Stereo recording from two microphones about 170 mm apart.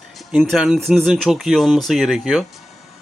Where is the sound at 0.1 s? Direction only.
Centre (ahead or behind).